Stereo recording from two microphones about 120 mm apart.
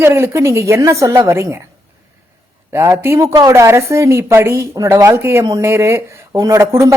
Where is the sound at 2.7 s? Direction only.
25° right (ahead or behind).